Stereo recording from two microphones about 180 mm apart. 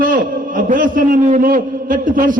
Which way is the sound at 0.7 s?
50° right (ahead or behind).